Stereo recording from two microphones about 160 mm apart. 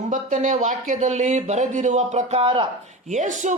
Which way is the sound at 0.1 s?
55° right (ahead or behind).